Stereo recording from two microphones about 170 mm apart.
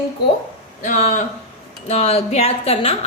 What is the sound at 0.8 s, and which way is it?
Speech, 45° left (ahead or behind).